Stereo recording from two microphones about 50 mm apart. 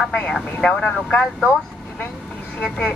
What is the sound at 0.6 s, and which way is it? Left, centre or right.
Speech, left.